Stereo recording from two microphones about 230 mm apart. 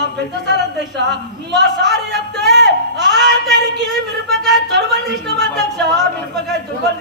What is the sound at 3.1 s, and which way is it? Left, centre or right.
Speech, right.